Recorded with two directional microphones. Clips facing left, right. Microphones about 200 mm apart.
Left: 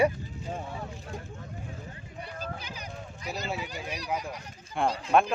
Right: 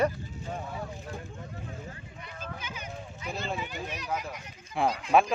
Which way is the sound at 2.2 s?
35° left (ahead or behind).